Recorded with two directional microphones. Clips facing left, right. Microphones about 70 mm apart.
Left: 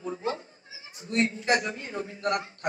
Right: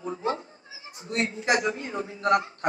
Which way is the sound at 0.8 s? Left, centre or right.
Right.